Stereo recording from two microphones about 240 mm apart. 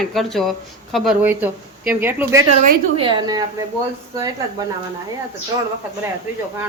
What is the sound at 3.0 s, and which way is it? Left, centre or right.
Speech, centre.